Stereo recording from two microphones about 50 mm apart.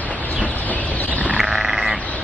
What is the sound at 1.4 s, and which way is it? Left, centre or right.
Sheep, centre.